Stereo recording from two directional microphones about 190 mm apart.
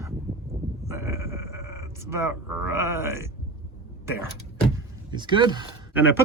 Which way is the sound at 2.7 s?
15° right (ahead or behind).